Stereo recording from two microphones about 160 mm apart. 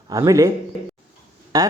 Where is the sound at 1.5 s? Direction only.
20° right (ahead or behind).